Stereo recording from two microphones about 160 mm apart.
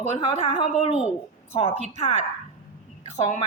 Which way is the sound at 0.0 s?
45° left (ahead or behind).